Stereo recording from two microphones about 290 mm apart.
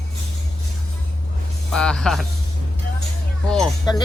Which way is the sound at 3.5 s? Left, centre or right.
Centre.